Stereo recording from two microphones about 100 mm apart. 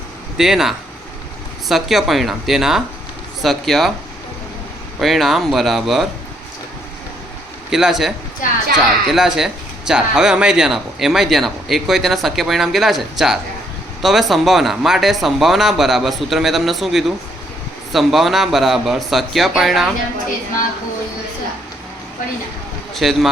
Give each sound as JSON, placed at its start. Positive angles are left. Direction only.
{"t": 0.3, "sound": "speech", "side_deg": -5}
{"t": 4.9, "sound": "speech", "side_deg": 0}
{"t": 7.7, "sound": "speech", "side_deg": -5}
{"t": 23.0, "sound": "speech", "side_deg": 0}